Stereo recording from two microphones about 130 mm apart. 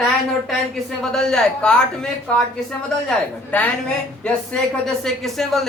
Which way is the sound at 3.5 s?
10° left (ahead or behind).